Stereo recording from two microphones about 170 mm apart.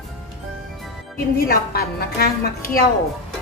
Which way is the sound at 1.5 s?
65° left (ahead or behind).